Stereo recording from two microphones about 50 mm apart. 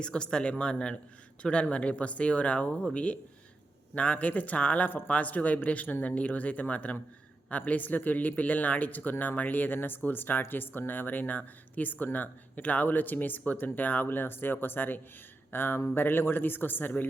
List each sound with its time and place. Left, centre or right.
0.0 s a man's voice: centre; by 16.9 s left